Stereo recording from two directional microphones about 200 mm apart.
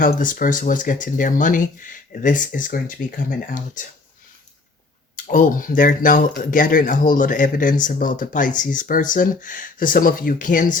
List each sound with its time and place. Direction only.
0.0 s speech: 45° left (ahead or behind)
5.1 s speech: 40° left (ahead or behind)